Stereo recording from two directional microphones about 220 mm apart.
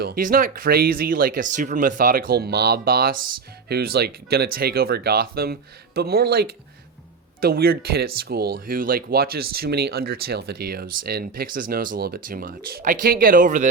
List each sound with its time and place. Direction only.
0.0 s speech: 40° right (ahead or behind)